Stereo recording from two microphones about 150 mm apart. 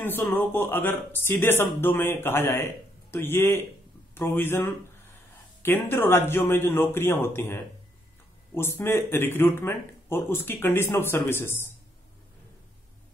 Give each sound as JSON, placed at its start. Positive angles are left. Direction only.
{"t": 0.2, "sound": "a man's voice", "side_deg": 10}